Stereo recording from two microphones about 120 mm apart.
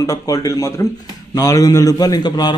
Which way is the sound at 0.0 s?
25° left (ahead or behind).